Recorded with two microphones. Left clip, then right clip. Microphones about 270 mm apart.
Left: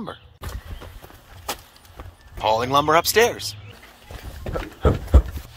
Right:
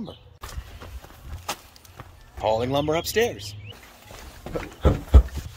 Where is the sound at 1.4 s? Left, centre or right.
Left.